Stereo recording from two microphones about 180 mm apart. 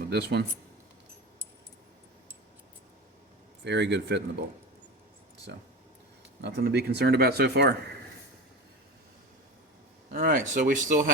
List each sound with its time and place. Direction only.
0.1 s speech: 65° right (ahead or behind)
3.6 s speech: 75° right (ahead or behind)
5.5 s speech: 70° right (ahead or behind)
10.1 s speech: 50° right (ahead or behind)